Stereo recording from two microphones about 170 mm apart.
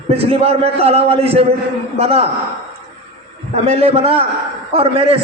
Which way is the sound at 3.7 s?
35° right (ahead or behind).